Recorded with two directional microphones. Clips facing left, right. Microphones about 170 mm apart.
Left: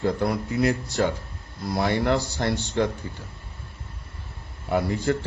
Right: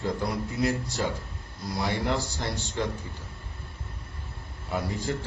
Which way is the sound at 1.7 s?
60° left (ahead or behind).